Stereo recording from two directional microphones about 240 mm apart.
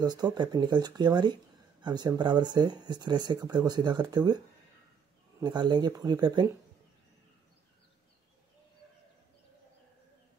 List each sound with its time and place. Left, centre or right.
0.0 s speech: centre
5.4 s speech: centre